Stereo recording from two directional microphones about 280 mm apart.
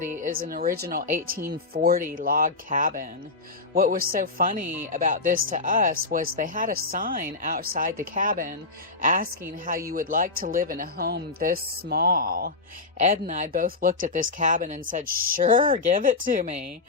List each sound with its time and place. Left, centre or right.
0.2 s speech: right
4.6 s speech: centre
4.9 s a woman's voice: right